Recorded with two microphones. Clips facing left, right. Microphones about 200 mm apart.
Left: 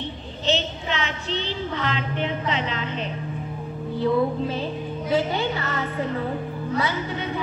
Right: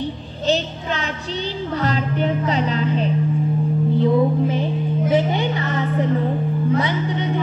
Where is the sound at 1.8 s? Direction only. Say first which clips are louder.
Right 7 dB; 40° right (ahead or behind).